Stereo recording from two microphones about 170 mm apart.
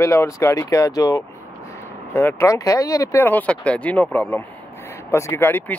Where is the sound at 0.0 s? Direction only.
15° left (ahead or behind).